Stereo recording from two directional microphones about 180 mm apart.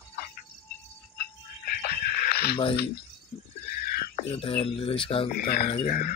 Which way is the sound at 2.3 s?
60° left (ahead or behind).